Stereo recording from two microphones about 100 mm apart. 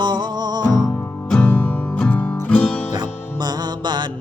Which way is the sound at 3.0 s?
45° right (ahead or behind).